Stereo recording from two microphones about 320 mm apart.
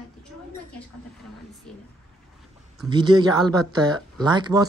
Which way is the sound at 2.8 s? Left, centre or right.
Centre.